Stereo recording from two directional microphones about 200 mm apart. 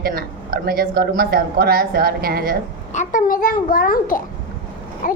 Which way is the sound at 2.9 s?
40° left (ahead or behind).